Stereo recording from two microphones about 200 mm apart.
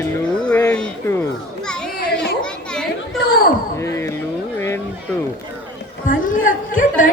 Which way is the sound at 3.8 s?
15° left (ahead or behind).